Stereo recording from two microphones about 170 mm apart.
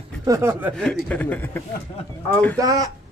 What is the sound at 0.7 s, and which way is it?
Speech, 5° left (ahead or behind).